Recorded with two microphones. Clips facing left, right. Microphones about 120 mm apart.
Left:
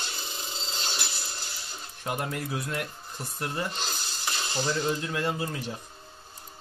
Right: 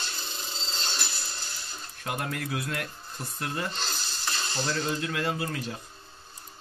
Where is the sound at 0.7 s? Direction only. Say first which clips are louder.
Even; 15° left (ahead or behind).